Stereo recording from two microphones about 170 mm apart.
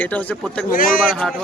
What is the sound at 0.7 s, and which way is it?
Speech, 55° left (ahead or behind).